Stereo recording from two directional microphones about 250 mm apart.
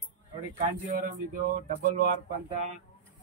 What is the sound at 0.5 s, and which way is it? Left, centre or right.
Speech, right.